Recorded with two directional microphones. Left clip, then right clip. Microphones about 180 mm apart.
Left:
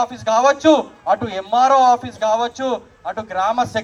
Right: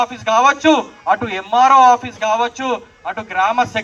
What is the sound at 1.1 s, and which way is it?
Speech, 20° left (ahead or behind).